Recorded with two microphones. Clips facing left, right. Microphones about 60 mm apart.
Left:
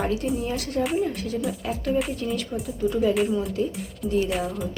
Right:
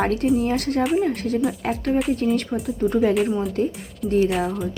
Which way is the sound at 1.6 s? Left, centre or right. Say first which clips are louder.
Right 3 dB; right.